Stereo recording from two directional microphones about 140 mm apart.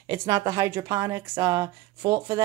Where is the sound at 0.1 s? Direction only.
25° right (ahead or behind).